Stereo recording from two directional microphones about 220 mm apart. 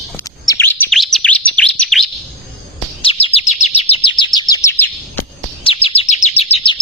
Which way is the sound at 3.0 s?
25° left (ahead or behind).